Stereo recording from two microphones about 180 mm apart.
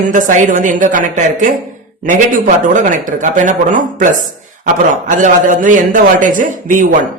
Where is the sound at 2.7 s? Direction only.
45° right (ahead or behind).